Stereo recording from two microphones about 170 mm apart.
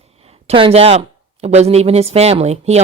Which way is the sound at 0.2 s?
35° right (ahead or behind).